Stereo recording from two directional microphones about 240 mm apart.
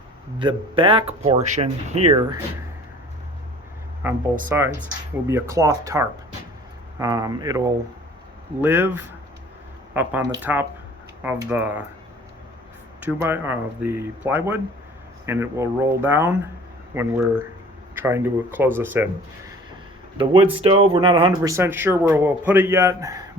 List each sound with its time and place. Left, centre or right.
0.3 s speech: right
4.4 s speech: centre
13.0 s speech: centre
20.1 s speech: right